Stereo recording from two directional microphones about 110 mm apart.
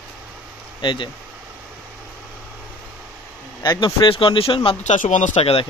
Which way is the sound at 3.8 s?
50° left (ahead or behind).